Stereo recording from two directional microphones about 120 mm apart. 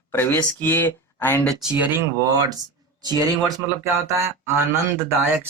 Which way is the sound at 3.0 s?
35° right (ahead or behind).